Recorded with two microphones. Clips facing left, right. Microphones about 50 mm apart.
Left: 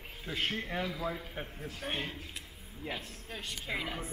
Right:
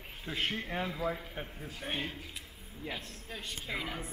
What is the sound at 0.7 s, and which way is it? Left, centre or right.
Speech, right.